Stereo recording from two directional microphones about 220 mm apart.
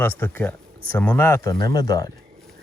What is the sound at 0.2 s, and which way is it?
Speech, 10° left (ahead or behind).